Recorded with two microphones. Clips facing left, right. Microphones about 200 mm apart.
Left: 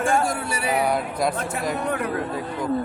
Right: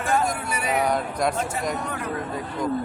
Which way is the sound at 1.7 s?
60° left (ahead or behind).